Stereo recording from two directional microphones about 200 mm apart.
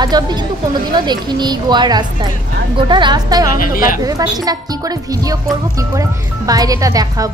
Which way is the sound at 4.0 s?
20° right (ahead or behind).